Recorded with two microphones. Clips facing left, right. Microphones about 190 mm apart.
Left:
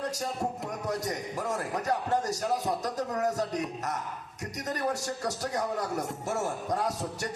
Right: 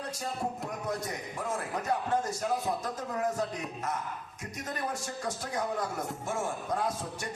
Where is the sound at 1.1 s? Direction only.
40° left (ahead or behind).